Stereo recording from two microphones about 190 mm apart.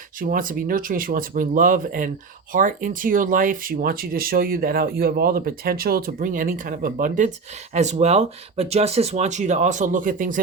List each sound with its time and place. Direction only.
0.2 s speech: 45° right (ahead or behind)